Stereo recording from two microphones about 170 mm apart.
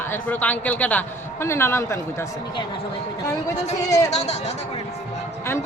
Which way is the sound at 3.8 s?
20° left (ahead or behind).